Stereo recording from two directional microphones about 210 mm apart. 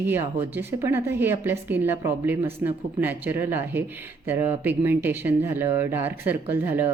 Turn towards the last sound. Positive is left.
turn(degrees=-10)  # may be behind; listen again after turning